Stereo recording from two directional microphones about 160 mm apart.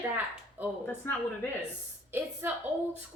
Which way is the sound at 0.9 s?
15° left (ahead or behind).